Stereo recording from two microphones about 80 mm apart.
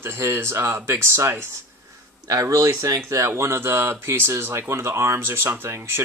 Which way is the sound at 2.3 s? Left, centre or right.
Right.